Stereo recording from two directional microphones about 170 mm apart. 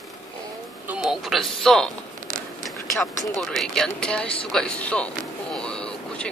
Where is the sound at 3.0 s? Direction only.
Centre (ahead or behind).